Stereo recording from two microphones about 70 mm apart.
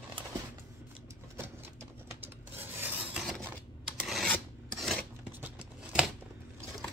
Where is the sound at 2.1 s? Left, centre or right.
Right.